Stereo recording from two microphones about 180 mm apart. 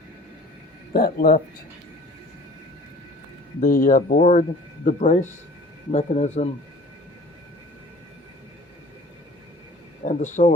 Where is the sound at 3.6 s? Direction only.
50° left (ahead or behind).